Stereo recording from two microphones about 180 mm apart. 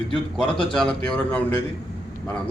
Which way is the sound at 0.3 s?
5° left (ahead or behind).